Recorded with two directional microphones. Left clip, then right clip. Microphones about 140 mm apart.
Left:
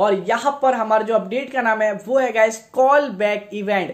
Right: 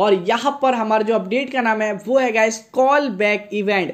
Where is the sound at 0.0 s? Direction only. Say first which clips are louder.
Right 1 dB; 35° right (ahead or behind).